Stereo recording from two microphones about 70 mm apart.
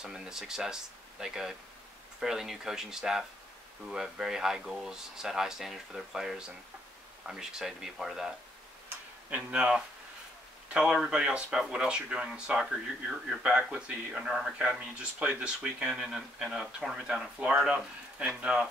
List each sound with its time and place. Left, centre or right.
0.0 s speech: centre
9.3 s speech: centre
14.1 s speech: centre